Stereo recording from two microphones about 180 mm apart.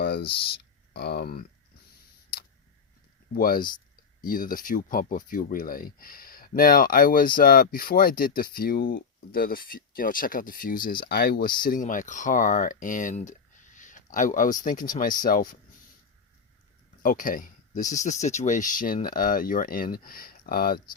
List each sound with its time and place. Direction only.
0.0 s a sound: 60° left (ahead or behind)
0.9 s speech: 60° left (ahead or behind)
3.3 s speech: 55° left (ahead or behind)
17.0 s speech: 50° left (ahead or behind)